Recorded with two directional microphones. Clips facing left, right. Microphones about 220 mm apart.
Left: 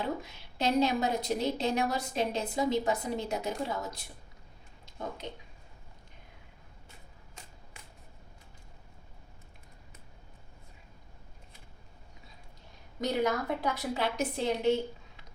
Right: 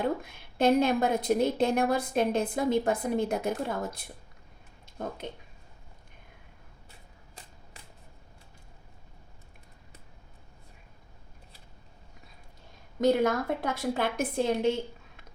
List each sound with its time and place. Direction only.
0.0 s a woman's voice: 55° right (ahead or behind)
13.0 s a woman's voice: 50° right (ahead or behind)